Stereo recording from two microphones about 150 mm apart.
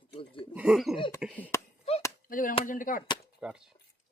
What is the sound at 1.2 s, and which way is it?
Speech, 10° right (ahead or behind).